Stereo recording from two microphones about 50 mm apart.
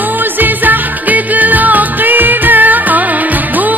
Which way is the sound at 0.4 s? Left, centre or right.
Right.